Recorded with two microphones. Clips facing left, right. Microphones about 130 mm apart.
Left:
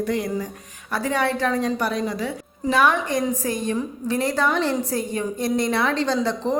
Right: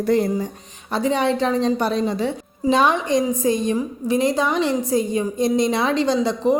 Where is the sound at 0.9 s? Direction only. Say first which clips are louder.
Right 4 dB; 20° right (ahead or behind).